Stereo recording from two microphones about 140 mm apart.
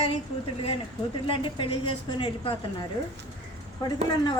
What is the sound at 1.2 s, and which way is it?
A woman's voice, 40° left (ahead or behind).